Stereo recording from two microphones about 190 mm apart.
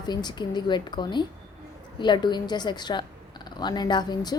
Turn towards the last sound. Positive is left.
turn(degrees=20)  # may be behind; listen again after turning